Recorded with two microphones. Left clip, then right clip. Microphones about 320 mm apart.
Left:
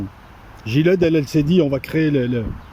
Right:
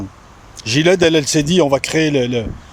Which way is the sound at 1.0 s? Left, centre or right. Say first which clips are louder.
Right 4 dB; right.